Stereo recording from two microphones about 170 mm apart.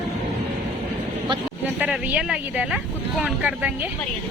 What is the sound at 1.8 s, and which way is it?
Speech, 5° right (ahead or behind).